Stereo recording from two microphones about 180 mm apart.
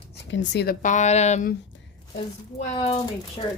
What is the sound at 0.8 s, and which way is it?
Speech, 40° left (ahead or behind).